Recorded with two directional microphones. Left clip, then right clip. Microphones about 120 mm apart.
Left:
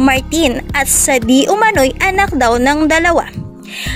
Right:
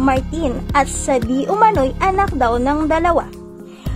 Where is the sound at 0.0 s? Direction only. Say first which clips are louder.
Left 5 dB; 30° left (ahead or behind).